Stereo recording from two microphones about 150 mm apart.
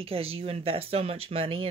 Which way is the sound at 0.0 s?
40° right (ahead or behind).